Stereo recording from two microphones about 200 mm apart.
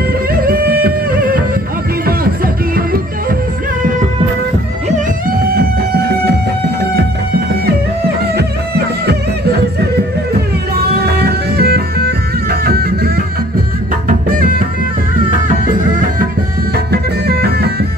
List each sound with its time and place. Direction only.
0.0 s music: 50° right (ahead or behind)
5.5 s music: 50° right (ahead or behind)
8.4 s music: 55° right (ahead or behind)
11.1 s music: 55° right (ahead or behind)
16.7 s music: 50° right (ahead or behind)